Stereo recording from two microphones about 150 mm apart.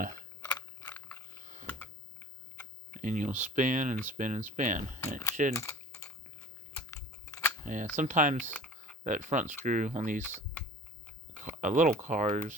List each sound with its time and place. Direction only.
0.9 s a sound: 10° left (ahead or behind)
1.6 s typing: 10° left (ahead or behind)
2.9 s speech: 55° right (ahead or behind)
5.5 s typing: 20° left (ahead or behind)
6.9 s scissors: 20° left (ahead or behind)
7.6 s speech: 55° right (ahead or behind)
8.5 s typing: 5° left (ahead or behind)
9.0 s speech: 55° right (ahead or behind)
11.4 s speech: 60° right (ahead or behind)